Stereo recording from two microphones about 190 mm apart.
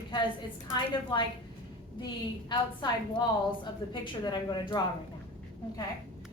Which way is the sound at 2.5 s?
25° left (ahead or behind).